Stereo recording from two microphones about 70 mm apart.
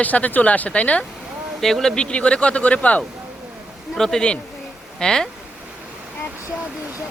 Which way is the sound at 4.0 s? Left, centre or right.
Centre.